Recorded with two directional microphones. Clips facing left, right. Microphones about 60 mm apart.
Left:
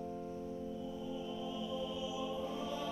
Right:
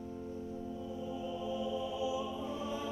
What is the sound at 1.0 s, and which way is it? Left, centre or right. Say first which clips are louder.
Music: right 5 dB; right.